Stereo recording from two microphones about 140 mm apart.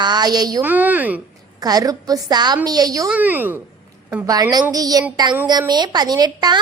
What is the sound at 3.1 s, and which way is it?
Speech, 10° right (ahead or behind).